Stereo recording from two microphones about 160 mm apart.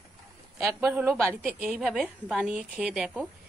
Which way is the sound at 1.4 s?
5° right (ahead or behind).